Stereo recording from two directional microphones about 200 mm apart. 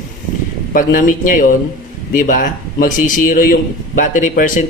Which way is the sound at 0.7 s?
40° left (ahead or behind).